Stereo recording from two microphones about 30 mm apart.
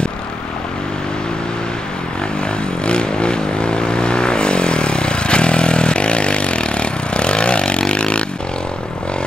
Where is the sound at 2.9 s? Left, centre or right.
Left.